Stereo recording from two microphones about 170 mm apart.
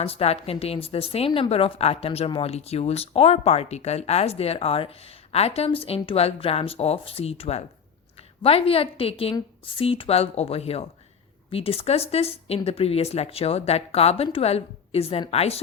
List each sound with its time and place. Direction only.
0.0 s a woman's voice: 35° left (ahead or behind)